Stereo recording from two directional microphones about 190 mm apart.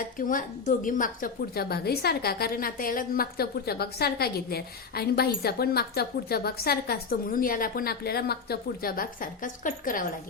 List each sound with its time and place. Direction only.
0.3 s a woman's voice: 45° left (ahead or behind)